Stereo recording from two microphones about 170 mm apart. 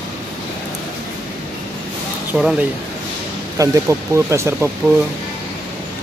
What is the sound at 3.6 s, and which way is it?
Speech, 20° right (ahead or behind).